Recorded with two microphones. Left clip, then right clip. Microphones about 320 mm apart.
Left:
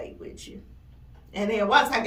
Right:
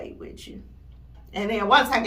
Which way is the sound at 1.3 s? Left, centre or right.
Centre.